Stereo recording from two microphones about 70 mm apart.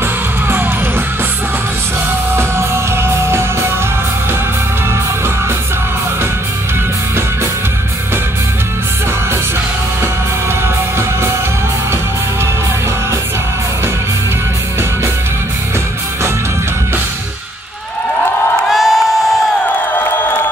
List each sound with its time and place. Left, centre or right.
0.5 s music: right
2.3 s music: right
18.7 s crowd: centre
19.9 s music: left